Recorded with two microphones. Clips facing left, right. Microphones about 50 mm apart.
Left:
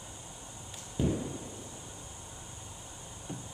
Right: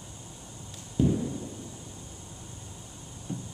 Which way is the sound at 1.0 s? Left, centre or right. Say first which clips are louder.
Right 6 dB; centre.